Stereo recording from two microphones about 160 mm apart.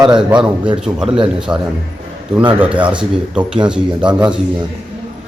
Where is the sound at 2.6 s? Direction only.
10° right (ahead or behind).